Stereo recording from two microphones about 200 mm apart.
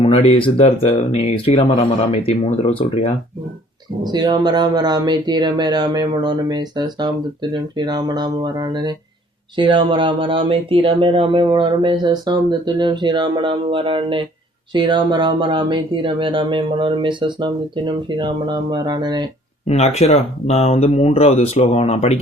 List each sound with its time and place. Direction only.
0.0 s speech: 30° left (ahead or behind)
4.0 s speech: 20° right (ahead or behind)
19.6 s speech: 30° left (ahead or behind)